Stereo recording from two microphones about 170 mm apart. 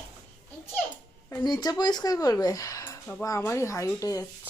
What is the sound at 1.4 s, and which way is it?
Speech, 25° left (ahead or behind).